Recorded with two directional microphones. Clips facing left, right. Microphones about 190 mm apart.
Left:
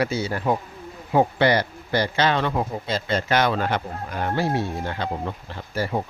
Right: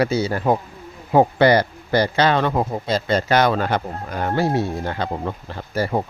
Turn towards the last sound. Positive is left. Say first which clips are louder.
# right 4 dB
turn(degrees=-50)  # may be behind; listen again after turning